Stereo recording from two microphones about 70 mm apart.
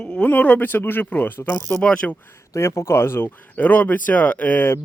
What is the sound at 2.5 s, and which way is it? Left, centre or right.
Speech, left.